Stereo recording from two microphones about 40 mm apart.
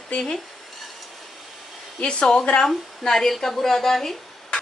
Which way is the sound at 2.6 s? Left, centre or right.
Centre.